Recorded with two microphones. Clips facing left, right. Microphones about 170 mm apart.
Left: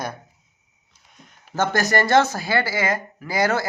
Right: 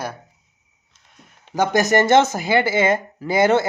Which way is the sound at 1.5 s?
15° right (ahead or behind).